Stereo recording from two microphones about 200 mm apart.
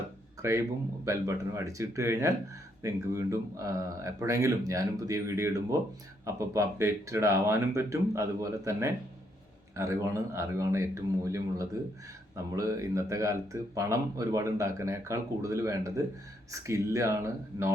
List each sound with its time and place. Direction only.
0.4 s speech: 15° right (ahead or behind)